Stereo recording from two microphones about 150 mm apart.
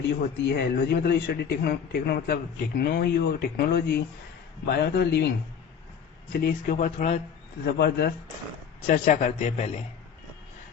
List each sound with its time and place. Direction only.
0.2 s a man's voice: 90° left
6.3 s a man's voice: 90° left
6.7 s speech: 55° left (ahead or behind)
7.8 s a man's voice: 90° left
8.9 s speech: 55° left (ahead or behind)